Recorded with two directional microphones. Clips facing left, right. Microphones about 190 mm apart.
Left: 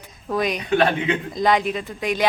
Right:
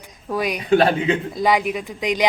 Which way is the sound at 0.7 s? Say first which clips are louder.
Right 4 dB; 35° right (ahead or behind).